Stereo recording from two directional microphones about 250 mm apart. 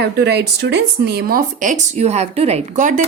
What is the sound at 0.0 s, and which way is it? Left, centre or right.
Speech, right.